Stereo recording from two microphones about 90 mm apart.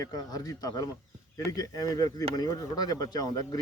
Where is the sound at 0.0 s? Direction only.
45° left (ahead or behind).